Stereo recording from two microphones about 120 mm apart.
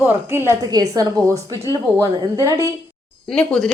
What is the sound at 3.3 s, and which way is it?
Speech, 5° left (ahead or behind).